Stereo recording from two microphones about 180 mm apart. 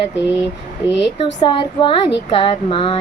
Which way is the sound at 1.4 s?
25° left (ahead or behind).